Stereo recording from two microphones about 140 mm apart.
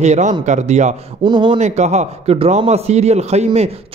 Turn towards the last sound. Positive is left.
turn(degrees=-50)  # may be behind; listen again after turning